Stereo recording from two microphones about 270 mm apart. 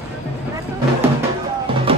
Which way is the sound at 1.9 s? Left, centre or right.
Centre.